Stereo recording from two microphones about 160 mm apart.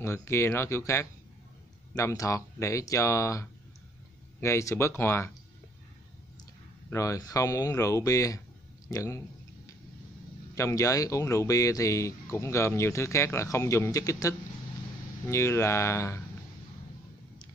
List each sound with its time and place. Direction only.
0.0 s speech: 15° left (ahead or behind)
6.9 s speech: 20° left (ahead or behind)
10.5 s speech: 20° left (ahead or behind)